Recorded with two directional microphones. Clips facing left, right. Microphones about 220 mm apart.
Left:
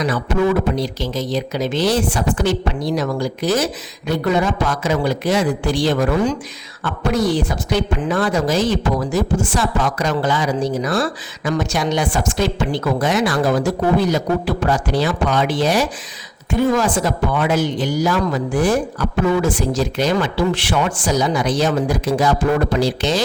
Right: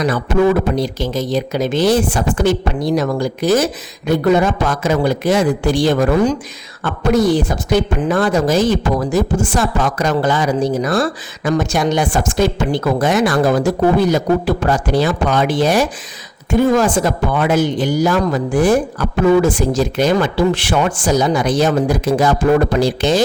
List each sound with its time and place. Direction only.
0.8 s speech: 50° right (ahead or behind)